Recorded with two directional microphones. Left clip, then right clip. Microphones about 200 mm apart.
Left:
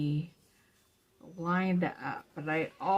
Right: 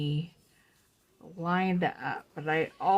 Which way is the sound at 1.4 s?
40° right (ahead or behind).